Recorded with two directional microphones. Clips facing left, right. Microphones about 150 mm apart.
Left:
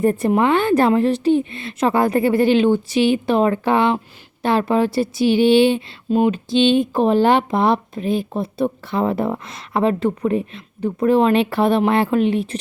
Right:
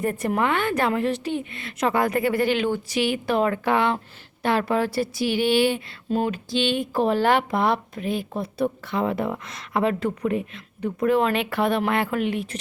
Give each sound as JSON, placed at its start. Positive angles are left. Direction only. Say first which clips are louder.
{"t": 0.0, "sound": "speech", "louder": "left 7 dB", "side_deg": 30}